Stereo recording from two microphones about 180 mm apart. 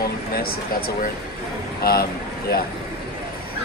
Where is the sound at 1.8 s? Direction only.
60° left (ahead or behind).